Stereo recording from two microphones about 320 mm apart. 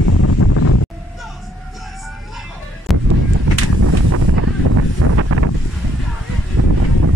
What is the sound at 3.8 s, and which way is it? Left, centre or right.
Wind noise, right.